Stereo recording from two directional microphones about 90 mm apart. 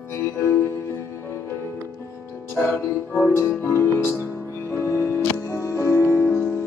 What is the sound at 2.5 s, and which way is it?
Music, 20° left (ahead or behind).